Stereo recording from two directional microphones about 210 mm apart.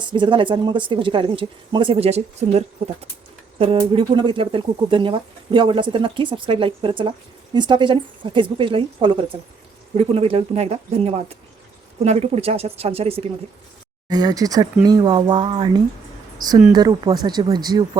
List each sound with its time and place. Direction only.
0.1 s speech: 25° right (ahead or behind)